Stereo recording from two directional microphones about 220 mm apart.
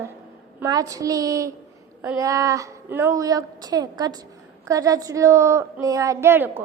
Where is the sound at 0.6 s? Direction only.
15° right (ahead or behind).